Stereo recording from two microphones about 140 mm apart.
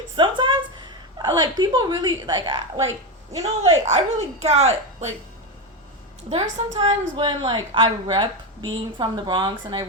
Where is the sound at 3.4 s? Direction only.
50° right (ahead or behind).